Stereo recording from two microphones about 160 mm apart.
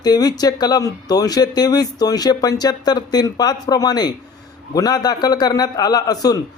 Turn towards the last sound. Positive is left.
turn(degrees=25)  # may be behind; listen again after turning